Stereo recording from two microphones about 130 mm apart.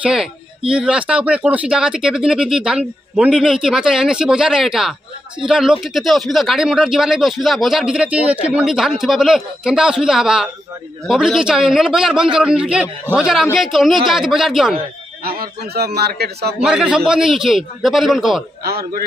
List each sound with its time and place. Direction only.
0.0 s speech: 5° right (ahead or behind)
16.5 s speech: 5° right (ahead or behind)